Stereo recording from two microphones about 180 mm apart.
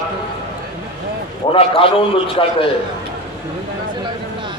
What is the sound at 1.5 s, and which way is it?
A man's voice, 30° left (ahead or behind).